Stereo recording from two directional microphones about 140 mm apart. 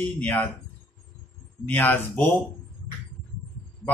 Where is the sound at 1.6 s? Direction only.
15° left (ahead or behind).